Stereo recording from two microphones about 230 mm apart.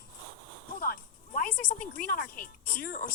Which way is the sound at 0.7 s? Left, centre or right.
Left.